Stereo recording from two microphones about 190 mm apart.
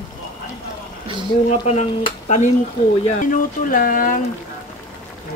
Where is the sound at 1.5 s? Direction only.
35° left (ahead or behind).